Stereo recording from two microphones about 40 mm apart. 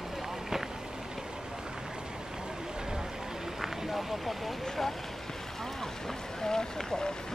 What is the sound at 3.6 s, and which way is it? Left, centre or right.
Vehicle, centre.